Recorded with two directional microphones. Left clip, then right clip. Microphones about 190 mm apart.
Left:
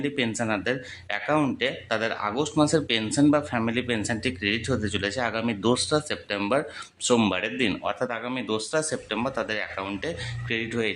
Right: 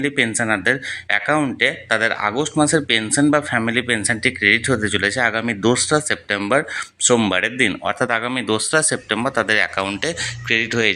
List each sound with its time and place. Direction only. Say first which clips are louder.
0.0 s speech: right 8 dB; 10° right (ahead or behind)
7.9 s speech: right 9 dB; 25° right (ahead or behind)